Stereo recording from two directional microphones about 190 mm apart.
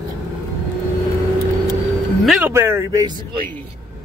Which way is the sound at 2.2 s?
5° right (ahead or behind).